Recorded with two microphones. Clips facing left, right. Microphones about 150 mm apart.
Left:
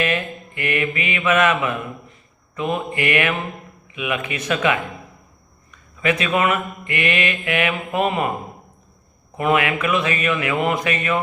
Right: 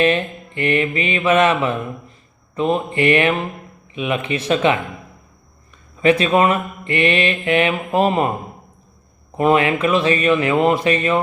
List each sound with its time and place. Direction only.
0.0 s mantra: 30° right (ahead or behind)
9.3 s mantra: 30° right (ahead or behind)